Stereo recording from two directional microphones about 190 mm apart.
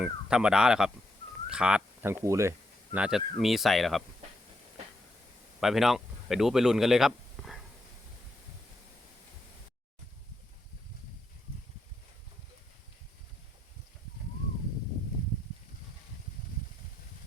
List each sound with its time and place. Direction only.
0.0 s speech: 5° right (ahead or behind)
5.5 s speech: centre (ahead or behind)